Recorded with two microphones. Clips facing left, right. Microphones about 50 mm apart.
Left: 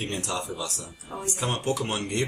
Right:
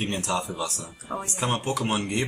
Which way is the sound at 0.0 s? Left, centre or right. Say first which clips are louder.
Right 3 dB; right.